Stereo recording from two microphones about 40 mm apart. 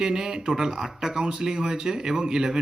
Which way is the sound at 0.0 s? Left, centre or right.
Centre.